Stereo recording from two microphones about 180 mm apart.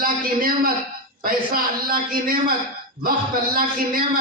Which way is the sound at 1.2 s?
55° right (ahead or behind).